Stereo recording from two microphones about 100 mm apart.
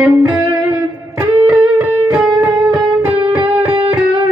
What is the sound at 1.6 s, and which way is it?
Music, 20° right (ahead or behind).